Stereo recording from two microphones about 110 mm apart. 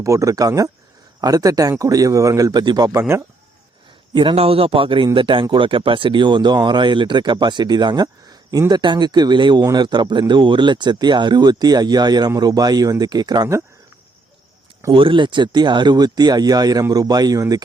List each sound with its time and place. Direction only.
0.0 s speech: 30° right (ahead or behind)
2.9 s speech: 25° right (ahead or behind)
4.1 s a man's voice: 50° right (ahead or behind)
14.9 s speech: 50° right (ahead or behind); by 17.6 s 35° right (ahead or behind)